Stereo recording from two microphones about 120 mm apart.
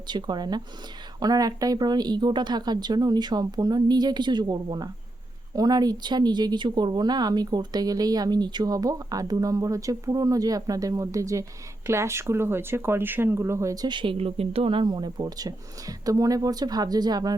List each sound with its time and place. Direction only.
0.1 s speech: 35° right (ahead or behind)